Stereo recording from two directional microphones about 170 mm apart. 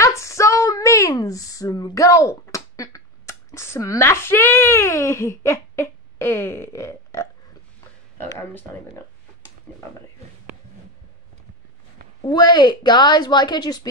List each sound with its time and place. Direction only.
0.0 s speech: 15° left (ahead or behind)
12.3 s a woman's voice: 25° left (ahead or behind)